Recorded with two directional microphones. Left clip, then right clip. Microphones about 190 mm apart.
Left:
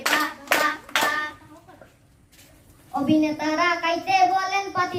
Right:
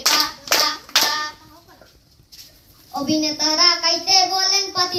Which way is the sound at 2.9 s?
Centre (ahead or behind).